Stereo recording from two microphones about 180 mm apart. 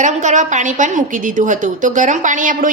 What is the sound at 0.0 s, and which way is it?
A woman's voice, 40° right (ahead or behind).